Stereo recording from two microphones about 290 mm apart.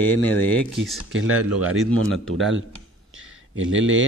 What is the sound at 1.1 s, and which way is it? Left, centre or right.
Speech, right.